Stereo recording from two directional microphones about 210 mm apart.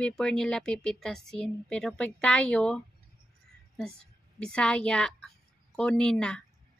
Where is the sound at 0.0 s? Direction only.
5° left (ahead or behind).